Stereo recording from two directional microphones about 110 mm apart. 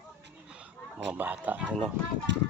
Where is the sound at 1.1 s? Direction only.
15° right (ahead or behind).